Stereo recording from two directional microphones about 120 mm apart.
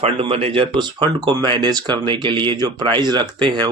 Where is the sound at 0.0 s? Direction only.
50° right (ahead or behind).